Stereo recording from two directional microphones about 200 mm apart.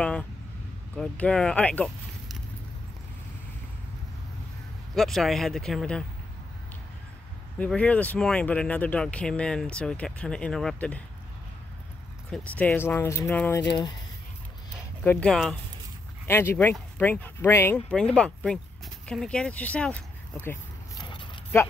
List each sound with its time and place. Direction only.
0.0 s vehicle: 5° left (ahead or behind)
0.9 s speech: 5° left (ahead or behind)
4.9 s speech: centre (ahead or behind)
7.5 s speech: 5° left (ahead or behind)
12.3 s speech: 5° left (ahead or behind)
15.0 s speech: 5° left (ahead or behind)
21.0 s a sound: 25° left (ahead or behind)